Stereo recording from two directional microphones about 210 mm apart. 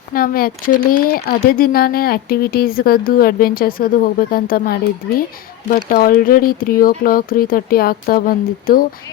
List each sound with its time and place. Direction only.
0.1 s speech: 45° left (ahead or behind)